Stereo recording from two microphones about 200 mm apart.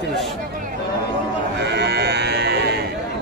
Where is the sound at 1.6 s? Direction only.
55° right (ahead or behind).